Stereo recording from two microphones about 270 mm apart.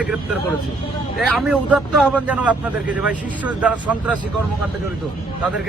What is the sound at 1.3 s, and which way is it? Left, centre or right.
A man's voice, centre.